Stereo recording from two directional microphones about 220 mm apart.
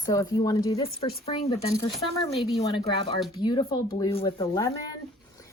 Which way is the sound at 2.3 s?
Centre (ahead or behind).